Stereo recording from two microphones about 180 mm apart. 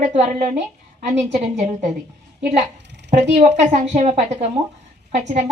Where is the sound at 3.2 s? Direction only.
40° right (ahead or behind).